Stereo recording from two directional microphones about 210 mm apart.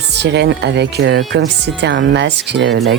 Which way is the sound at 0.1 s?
55° right (ahead or behind).